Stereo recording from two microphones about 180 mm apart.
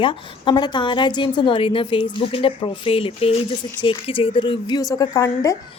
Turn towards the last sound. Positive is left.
turn(degrees=20)  # may be behind; listen again after turning